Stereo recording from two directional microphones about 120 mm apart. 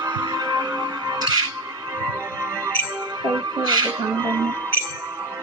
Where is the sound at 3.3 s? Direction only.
35° right (ahead or behind).